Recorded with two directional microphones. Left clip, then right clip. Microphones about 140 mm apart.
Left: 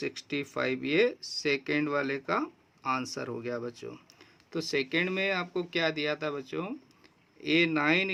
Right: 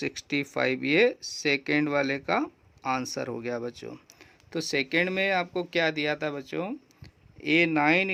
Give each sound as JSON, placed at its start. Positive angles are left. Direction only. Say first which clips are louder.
{"t": 0.0, "sound": "speech", "louder": "right 4 dB", "side_deg": -35}